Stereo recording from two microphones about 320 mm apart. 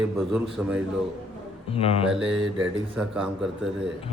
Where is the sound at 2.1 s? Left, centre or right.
Centre.